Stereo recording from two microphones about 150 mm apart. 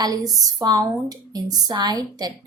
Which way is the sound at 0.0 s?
25° right (ahead or behind).